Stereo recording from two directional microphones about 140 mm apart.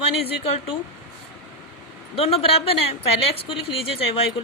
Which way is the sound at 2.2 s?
45° left (ahead or behind).